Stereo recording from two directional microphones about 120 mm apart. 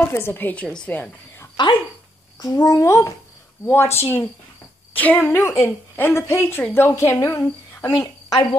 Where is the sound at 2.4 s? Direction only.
30° left (ahead or behind).